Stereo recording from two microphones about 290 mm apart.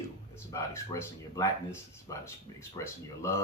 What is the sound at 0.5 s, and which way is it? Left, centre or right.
Speech, centre.